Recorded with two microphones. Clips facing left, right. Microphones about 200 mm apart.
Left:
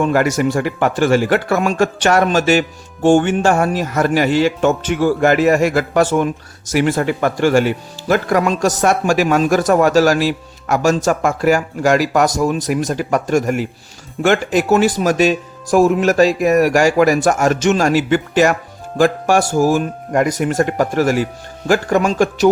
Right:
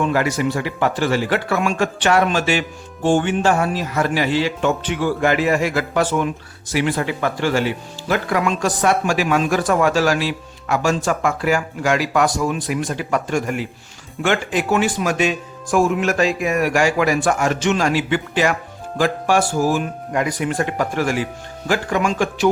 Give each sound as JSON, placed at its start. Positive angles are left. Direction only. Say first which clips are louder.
{"t": 0.0, "sound": "speech", "louder": "left 4 dB", "side_deg": 45}